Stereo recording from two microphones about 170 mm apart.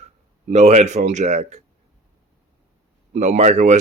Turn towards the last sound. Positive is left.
turn(degrees=-45)  # may be behind; listen again after turning